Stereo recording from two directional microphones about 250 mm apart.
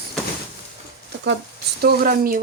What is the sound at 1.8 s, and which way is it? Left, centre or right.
Speech, right.